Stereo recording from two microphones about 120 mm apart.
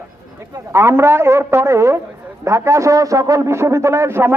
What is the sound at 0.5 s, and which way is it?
A woman's voice, 20° right (ahead or behind).